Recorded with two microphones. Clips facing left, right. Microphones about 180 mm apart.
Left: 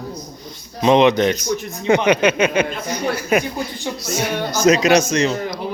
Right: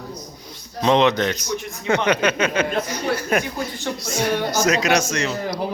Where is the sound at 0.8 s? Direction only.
15° left (ahead or behind).